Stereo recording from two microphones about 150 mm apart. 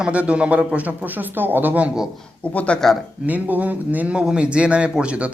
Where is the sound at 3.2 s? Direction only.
10° right (ahead or behind).